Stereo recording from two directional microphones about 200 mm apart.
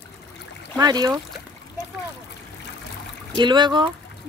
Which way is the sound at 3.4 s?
20° right (ahead or behind).